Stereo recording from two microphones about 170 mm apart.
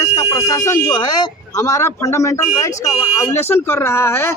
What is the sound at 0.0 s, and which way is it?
Speech, 20° left (ahead or behind).